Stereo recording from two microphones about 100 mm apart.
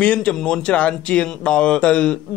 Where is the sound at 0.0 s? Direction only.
10° left (ahead or behind).